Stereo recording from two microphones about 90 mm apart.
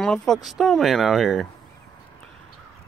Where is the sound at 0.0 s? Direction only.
5° left (ahead or behind).